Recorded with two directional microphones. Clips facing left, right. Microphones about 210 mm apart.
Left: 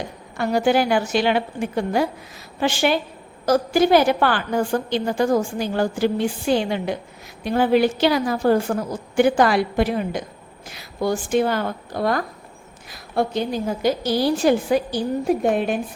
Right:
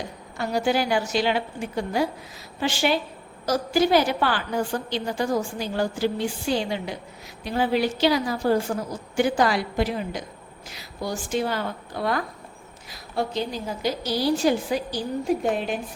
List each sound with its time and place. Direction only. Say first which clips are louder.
0.3 s a woman's voice: left 5 dB; 60° left (ahead or behind)
11.9 s speech: left 4 dB; 45° left (ahead or behind)
13.1 s a woman's voice: left 5 dB; 55° left (ahead or behind)